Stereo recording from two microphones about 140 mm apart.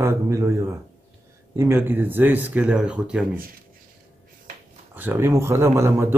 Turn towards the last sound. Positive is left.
turn(degrees=-20)  # may be behind; listen again after turning